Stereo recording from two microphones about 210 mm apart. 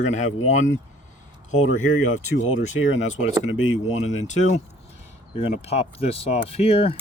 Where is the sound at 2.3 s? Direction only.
65° left (ahead or behind).